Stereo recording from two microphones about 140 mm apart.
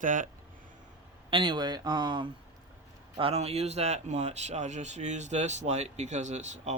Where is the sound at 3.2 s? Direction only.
45° right (ahead or behind).